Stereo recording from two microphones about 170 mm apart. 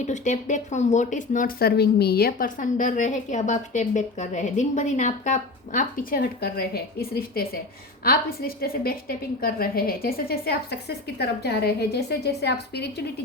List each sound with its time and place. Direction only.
0.0 s a woman's voice: 45° left (ahead or behind); by 12.8 s 75° left (ahead or behind)